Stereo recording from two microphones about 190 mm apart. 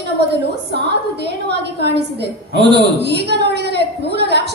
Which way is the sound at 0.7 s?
65° right (ahead or behind).